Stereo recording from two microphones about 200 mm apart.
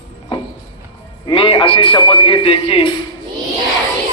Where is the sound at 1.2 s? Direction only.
25° left (ahead or behind).